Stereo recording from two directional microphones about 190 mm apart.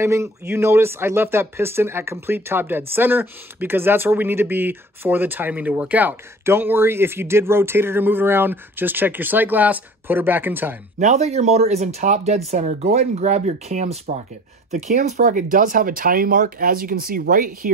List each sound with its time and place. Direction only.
0.0 s speech: 15° right (ahead or behind)
11.0 s speech: 35° right (ahead or behind)